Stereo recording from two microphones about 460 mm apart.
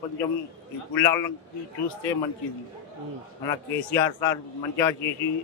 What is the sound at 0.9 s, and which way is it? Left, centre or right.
Speech, centre.